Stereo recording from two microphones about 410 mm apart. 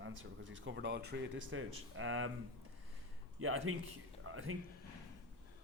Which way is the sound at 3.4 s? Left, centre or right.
Right.